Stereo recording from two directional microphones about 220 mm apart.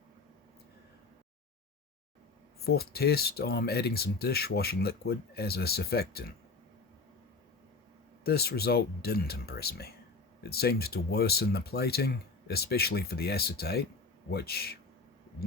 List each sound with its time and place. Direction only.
2.6 s speech: 45° left (ahead or behind)
8.2 s speech: 45° left (ahead or behind)